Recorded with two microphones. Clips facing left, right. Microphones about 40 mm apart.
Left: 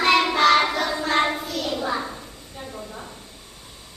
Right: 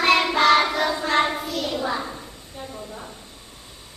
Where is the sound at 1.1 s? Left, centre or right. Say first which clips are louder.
Left 1 dB; centre.